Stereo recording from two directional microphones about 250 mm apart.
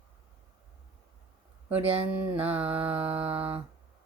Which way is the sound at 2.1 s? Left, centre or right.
Centre.